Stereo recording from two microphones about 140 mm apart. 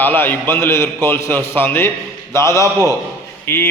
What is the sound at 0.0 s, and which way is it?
A man's voice, 15° left (ahead or behind).